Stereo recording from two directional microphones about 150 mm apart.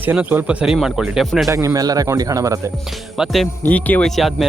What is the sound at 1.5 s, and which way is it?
Speech, 20° right (ahead or behind).